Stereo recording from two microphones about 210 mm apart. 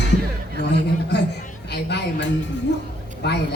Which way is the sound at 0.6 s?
55° left (ahead or behind).